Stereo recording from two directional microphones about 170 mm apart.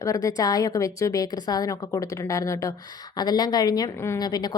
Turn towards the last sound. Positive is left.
turn(degrees=25)  # may be behind; listen again after turning